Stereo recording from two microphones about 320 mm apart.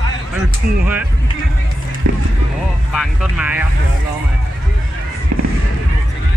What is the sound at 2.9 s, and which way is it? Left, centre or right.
Speech, centre.